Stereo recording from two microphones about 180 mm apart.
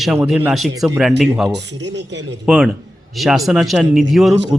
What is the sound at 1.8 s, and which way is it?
Speech, 75° right (ahead or behind).